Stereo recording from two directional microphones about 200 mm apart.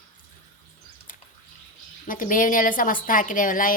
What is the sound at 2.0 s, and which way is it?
A woman's voice, 40° left (ahead or behind).